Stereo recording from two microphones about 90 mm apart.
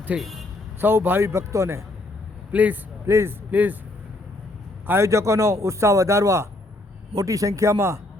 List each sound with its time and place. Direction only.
0.2 s speech: centre (ahead or behind)
0.8 s a man's voice: 25° right (ahead or behind)
2.5 s speech: 15° right (ahead or behind)
3.1 s a man's voice: 30° right (ahead or behind)
3.5 s speech: 20° right (ahead or behind)
4.9 s a man's voice: 30° right (ahead or behind)